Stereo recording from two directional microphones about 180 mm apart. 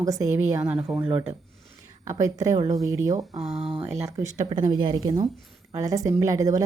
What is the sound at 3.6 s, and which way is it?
Speech, 30° right (ahead or behind).